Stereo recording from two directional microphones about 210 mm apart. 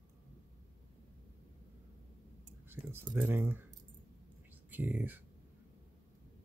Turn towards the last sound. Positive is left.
turn(degrees=-10)  # may be behind; listen again after turning